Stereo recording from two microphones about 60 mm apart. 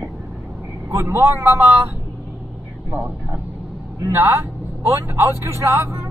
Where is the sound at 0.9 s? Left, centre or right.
Right.